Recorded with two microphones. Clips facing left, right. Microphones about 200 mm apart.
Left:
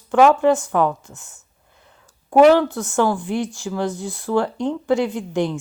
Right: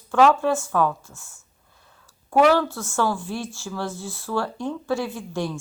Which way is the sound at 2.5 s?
20° left (ahead or behind).